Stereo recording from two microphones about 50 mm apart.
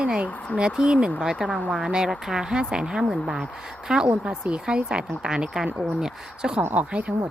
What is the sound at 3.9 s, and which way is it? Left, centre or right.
Speech, right.